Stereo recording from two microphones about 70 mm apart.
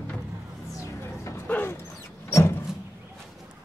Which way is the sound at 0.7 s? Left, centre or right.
Left.